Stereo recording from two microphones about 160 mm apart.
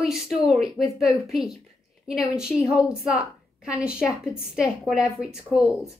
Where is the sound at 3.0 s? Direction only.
5° right (ahead or behind).